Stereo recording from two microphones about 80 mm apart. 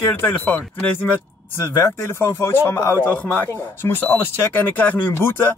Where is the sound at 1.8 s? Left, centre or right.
Left.